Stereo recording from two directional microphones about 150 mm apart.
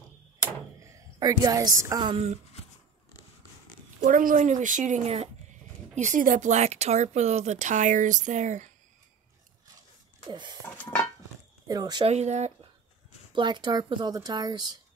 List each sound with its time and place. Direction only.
0.8 s a woman's voice: 20° right (ahead or behind)
2.1 s speech: 45° right (ahead or behind)
4.0 s a woman's voice: 65° right (ahead or behind); by 5.3 s 45° right (ahead or behind)
5.9 s speech: 55° right (ahead or behind)
10.3 s a sound: 30° right (ahead or behind)
11.6 s speech: 25° right (ahead or behind)
12.0 s speech: 45° right (ahead or behind)
13.3 s speech: 30° right (ahead or behind)